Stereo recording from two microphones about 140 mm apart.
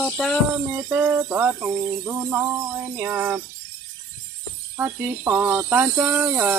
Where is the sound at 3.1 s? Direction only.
10° right (ahead or behind).